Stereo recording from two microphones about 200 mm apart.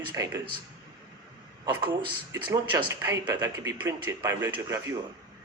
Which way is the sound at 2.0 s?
25° right (ahead or behind).